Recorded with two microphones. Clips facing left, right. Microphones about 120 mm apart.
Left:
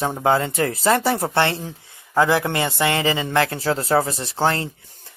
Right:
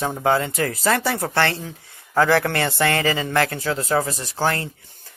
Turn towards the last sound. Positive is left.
turn(degrees=25)  # may be behind; listen again after turning